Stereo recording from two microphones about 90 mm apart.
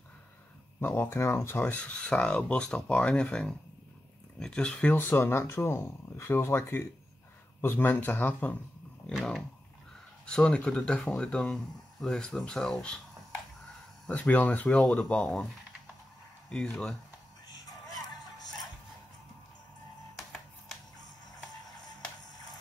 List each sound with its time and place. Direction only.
0.7 s speech: 25° left (ahead or behind)
4.9 s speech: 25° left (ahead or behind)
10.2 s speech: 10° left (ahead or behind)
14.0 s speech: 15° left (ahead or behind)
16.4 s speech: 5° left (ahead or behind)